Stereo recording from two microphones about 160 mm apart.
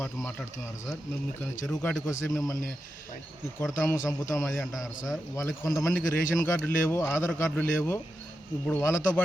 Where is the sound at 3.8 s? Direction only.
20° left (ahead or behind).